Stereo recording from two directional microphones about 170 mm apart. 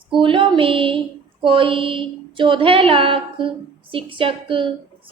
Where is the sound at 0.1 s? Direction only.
30° right (ahead or behind).